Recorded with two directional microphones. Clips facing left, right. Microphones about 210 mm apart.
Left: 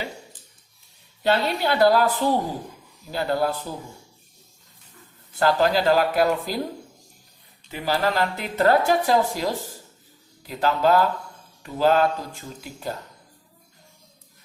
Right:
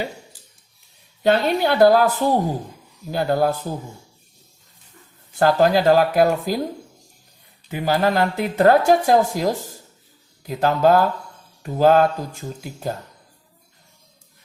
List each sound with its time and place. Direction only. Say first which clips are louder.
1.2 s a woman's voice: right 4 dB; 50° right (ahead or behind)
5.4 s a woman's voice: right 4 dB; 45° right (ahead or behind)
7.7 s a woman's voice: right 4 dB; 50° right (ahead or behind)